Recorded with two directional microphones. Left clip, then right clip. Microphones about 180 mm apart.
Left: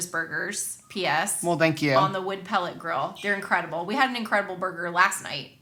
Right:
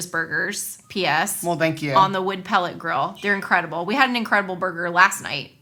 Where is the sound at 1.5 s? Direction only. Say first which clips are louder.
Left 1 dB; 25° left (ahead or behind).